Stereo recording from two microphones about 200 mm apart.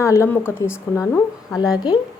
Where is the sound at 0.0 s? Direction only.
15° left (ahead or behind).